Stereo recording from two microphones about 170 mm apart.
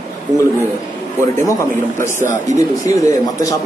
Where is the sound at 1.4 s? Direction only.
15° left (ahead or behind).